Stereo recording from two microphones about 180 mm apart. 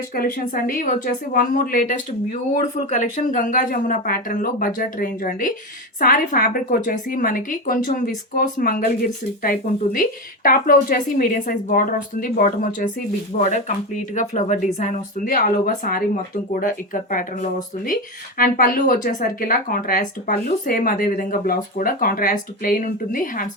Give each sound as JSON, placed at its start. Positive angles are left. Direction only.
{"t": 0.1, "sound": "speech", "side_deg": 50}